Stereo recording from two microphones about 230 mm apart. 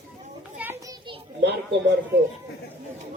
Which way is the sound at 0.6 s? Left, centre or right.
Centre.